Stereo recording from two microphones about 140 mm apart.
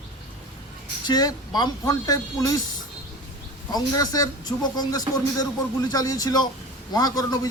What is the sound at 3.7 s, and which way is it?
Speech, 25° left (ahead or behind).